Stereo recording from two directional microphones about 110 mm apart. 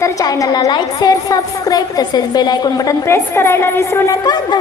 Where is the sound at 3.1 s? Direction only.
25° left (ahead or behind).